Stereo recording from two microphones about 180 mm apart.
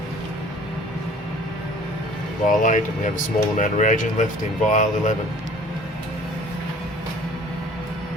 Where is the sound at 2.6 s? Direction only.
45° left (ahead or behind).